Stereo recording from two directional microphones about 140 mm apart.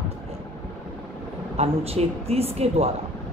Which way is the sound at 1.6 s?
45° right (ahead or behind).